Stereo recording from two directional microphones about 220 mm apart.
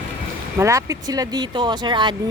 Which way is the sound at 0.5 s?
15° right (ahead or behind).